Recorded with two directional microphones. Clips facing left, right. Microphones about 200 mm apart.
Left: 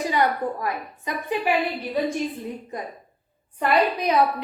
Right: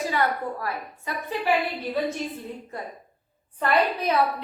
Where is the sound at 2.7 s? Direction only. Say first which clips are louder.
Left 3 dB; 15° left (ahead or behind).